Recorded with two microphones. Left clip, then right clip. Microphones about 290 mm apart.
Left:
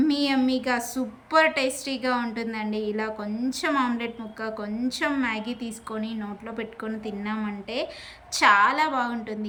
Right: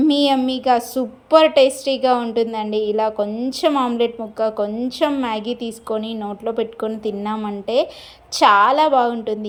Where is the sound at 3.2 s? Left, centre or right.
Right.